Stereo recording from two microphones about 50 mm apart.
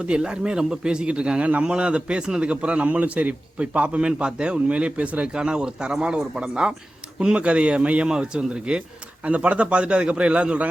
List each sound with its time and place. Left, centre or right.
0.0 s a man's voice: centre